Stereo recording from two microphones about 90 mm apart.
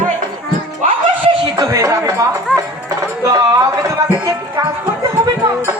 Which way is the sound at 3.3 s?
40° right (ahead or behind).